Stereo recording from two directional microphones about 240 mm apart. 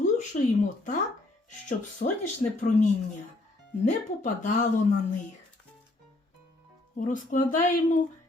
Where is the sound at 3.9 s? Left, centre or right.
Left.